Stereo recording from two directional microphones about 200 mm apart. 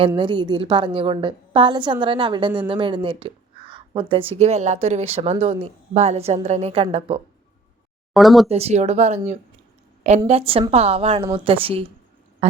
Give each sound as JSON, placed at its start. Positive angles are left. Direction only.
{"t": 0.2, "sound": "a woman's voice", "side_deg": -25}
{"t": 8.1, "sound": "speech", "side_deg": 0}
{"t": 8.4, "sound": "a woman's voice", "side_deg": -30}